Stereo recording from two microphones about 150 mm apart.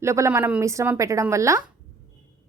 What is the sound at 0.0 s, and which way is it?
A woman's voice, 20° right (ahead or behind).